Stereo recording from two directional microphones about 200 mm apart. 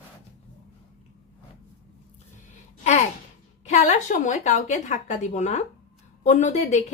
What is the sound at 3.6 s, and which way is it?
A woman's voice, 35° left (ahead or behind).